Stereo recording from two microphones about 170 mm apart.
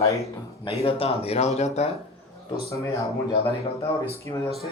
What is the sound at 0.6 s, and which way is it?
Speech, 35° left (ahead or behind).